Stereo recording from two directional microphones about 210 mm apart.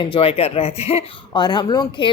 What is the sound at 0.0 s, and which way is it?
Speech, 25° left (ahead or behind).